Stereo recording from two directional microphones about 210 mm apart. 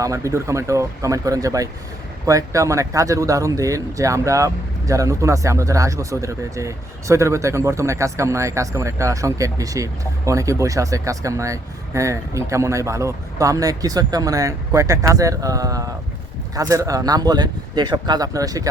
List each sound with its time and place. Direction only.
0.0 s speech: 15° right (ahead or behind)